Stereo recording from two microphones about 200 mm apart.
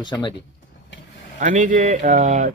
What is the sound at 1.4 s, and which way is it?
Speech, 40° right (ahead or behind).